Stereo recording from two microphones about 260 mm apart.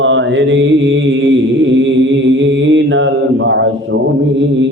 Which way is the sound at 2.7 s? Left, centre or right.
Right.